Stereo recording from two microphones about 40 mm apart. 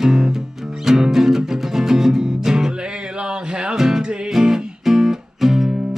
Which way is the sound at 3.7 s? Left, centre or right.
Centre.